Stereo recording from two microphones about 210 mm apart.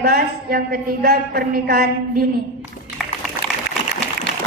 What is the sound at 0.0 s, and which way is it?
A woman's voice, 45° right (ahead or behind).